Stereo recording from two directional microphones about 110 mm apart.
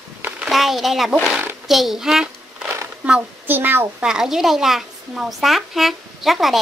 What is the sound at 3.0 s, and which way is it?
A woman's voice, 15° right (ahead or behind).